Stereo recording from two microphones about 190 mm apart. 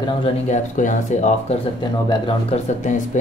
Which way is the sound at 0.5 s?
40° left (ahead or behind).